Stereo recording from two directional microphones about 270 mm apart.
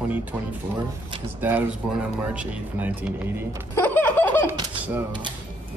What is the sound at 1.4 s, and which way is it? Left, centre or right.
Speech, centre.